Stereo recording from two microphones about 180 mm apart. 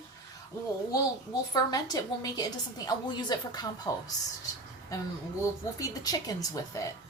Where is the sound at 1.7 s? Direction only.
20° left (ahead or behind).